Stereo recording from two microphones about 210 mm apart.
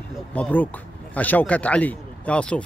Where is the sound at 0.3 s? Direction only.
10° left (ahead or behind).